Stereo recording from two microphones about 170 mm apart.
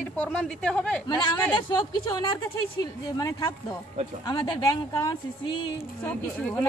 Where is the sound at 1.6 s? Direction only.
25° left (ahead or behind).